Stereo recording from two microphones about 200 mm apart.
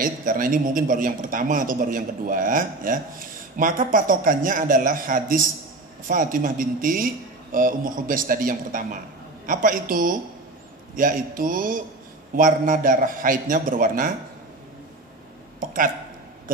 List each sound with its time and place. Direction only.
0.0 s a man's voice: 45° right (ahead or behind)
15.6 s a man's voice: 45° right (ahead or behind)